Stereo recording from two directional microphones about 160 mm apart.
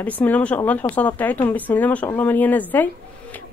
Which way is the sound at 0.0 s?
10° left (ahead or behind).